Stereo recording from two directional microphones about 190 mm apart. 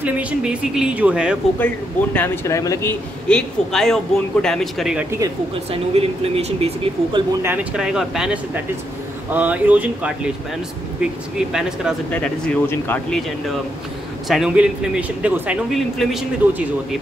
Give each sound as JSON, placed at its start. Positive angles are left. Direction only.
{"t": 0.0, "sound": "speech", "side_deg": -5}
{"t": 2.1, "sound": "speech", "side_deg": 15}
{"t": 5.7, "sound": "speech", "side_deg": -30}
{"t": 7.4, "sound": "speech", "side_deg": -5}